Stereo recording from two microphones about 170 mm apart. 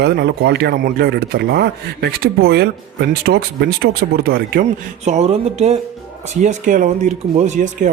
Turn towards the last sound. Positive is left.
turn(degrees=-45)  # may be behind; listen again after turning